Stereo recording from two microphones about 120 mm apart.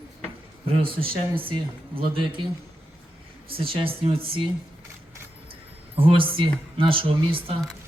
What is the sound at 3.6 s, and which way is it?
Speech, 50° right (ahead or behind).